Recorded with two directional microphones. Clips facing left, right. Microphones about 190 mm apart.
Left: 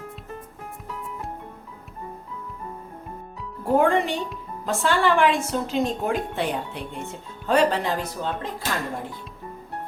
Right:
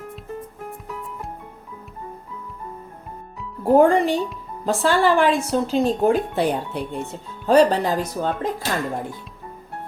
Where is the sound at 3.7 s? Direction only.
40° right (ahead or behind).